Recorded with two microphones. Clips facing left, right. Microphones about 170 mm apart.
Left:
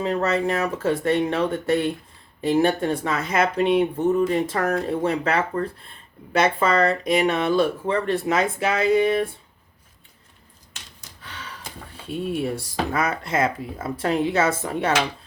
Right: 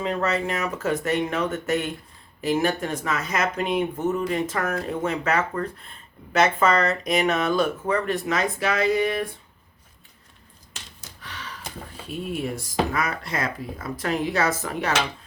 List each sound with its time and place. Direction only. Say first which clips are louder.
0.0 s speech: left 3 dB; 35° left (ahead or behind)
11.2 s gasp: even; 30° left (ahead or behind)
12.0 s speech: left 4 dB; 30° left (ahead or behind)